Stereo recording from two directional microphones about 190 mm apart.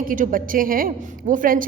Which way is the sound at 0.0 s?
45° right (ahead or behind).